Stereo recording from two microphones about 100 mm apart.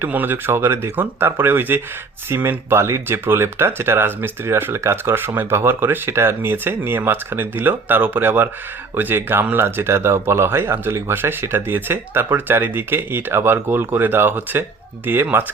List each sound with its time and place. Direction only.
0.0 s speech: 20° right (ahead or behind)